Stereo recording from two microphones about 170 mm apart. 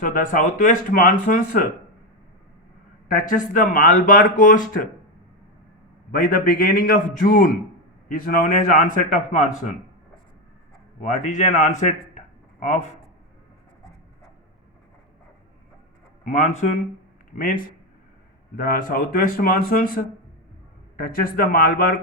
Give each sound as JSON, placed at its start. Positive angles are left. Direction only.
{"t": 0.0, "sound": "speech", "side_deg": 50}
{"t": 3.1, "sound": "speech", "side_deg": 50}
{"t": 6.1, "sound": "speech", "side_deg": 55}
{"t": 11.3, "sound": "speech", "side_deg": 45}
{"t": 16.2, "sound": "speech", "side_deg": 45}
{"t": 17.3, "sound": "speech", "side_deg": 55}